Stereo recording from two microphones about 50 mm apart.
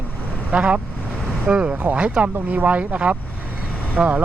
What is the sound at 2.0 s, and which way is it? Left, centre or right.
Speech, right.